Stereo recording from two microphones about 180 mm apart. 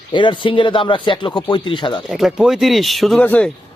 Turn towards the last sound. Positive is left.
turn(degrees=10)  # may be behind; listen again after turning